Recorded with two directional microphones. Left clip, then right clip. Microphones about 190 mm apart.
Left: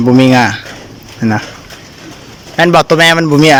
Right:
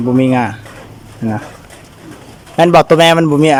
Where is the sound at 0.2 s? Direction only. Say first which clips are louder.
Left 4 dB; 10° right (ahead or behind).